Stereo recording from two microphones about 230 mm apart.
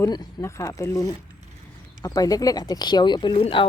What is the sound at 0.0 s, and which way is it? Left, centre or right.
Speech, centre.